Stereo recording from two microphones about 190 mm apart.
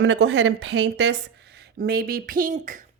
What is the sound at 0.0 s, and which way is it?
Speech, 75° right (ahead or behind).